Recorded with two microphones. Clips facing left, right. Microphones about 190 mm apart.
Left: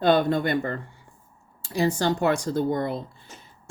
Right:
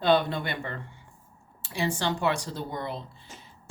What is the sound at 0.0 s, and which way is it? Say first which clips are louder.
Speech: left 4 dB; 45° left (ahead or behind).